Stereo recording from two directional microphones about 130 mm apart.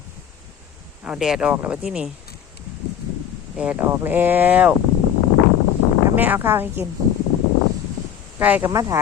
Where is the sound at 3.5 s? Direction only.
10° right (ahead or behind).